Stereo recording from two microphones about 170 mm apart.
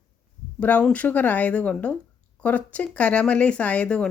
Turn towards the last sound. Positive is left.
turn(degrees=5)  # may be behind; listen again after turning